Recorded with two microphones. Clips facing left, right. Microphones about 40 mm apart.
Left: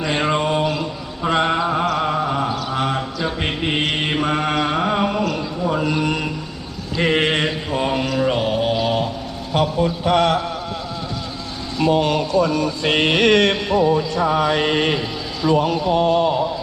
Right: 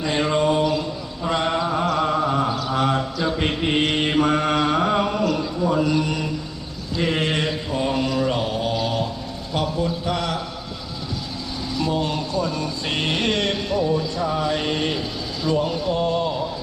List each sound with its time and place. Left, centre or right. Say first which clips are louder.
0.0 s mantra: left 1 dB; left
5.2 s a sound: even; centre
5.8 s music: left 1 dB; left
6.9 s mantra: left 4 dB; left
9.5 s music: left 5 dB; left
11.8 s music: left 7 dB; left
14.2 s mantra: left 5 dB; left
14.6 s music: left 5 dB; left
15.8 s a sound: left 5 dB; left